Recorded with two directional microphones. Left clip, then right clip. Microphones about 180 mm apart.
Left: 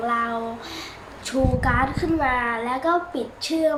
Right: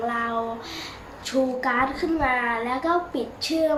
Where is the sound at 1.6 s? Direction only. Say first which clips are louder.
Left 1 dB; 15° left (ahead or behind).